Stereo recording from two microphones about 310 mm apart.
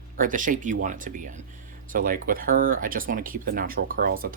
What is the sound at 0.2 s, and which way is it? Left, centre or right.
Speech, right.